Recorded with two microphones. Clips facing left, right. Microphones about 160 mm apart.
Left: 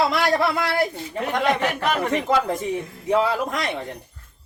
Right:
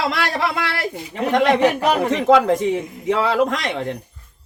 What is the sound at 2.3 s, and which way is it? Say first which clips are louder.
A man's voice: right 7 dB; 90° right.